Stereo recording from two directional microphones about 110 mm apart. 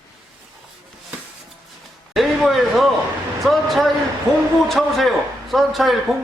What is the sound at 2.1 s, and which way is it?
A man's voice, centre (ahead or behind).